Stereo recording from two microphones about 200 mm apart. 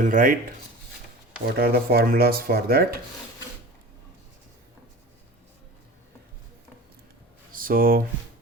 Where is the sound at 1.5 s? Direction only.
50° right (ahead or behind).